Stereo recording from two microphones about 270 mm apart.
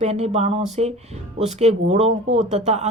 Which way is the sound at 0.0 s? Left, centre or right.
Right.